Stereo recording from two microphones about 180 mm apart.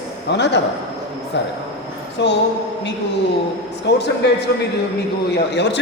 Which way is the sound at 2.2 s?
70° left (ahead or behind).